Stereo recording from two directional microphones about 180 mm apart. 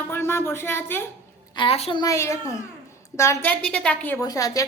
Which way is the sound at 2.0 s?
15° left (ahead or behind).